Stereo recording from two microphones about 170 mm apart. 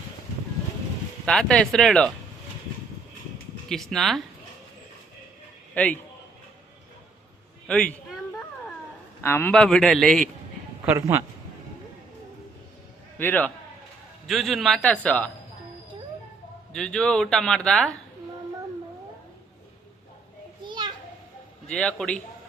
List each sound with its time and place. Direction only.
1.2 s speech: 5° left (ahead or behind)
3.7 s speech: centre (ahead or behind)
5.7 s a man's voice: 10° left (ahead or behind)
7.7 s a man's voice: 5° left (ahead or behind)
9.2 s speech: 10° left (ahead or behind)
10.8 s speech: 15° right (ahead or behind)
13.1 s a man's voice: 10° left (ahead or behind)
14.3 s speech: centre (ahead or behind)
16.7 s speech: 5° left (ahead or behind)
20.6 s children playing: 25° right (ahead or behind)
21.7 s speech: 5° left (ahead or behind)